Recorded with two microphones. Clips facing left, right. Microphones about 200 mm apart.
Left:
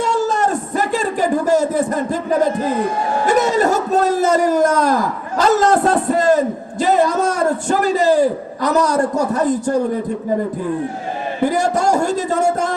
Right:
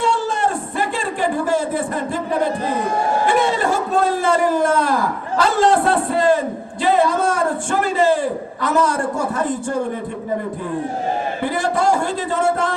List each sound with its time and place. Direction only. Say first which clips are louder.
0.0 s a sound: left 2 dB; 40° left (ahead or behind)
3.2 s a man's voice: left 6 dB; 40° left (ahead or behind)
11.4 s speech: left 3 dB; 45° left (ahead or behind)